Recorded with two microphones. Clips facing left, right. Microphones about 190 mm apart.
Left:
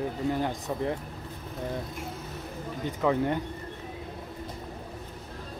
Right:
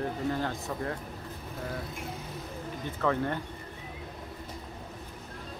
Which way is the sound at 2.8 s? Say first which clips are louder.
Left 3 dB; 15° left (ahead or behind).